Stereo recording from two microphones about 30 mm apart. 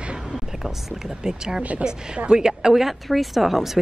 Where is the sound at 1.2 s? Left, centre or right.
Right.